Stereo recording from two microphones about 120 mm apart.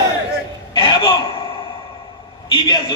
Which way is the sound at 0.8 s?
40° left (ahead or behind).